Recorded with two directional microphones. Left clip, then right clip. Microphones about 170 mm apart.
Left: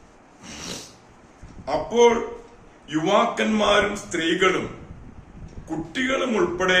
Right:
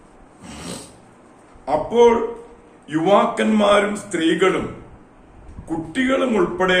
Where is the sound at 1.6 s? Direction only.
10° right (ahead or behind).